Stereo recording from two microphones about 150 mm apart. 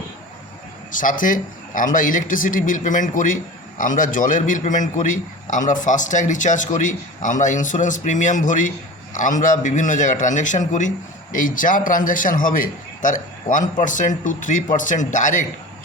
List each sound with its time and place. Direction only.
0.9 s a man's voice: 60° left (ahead or behind)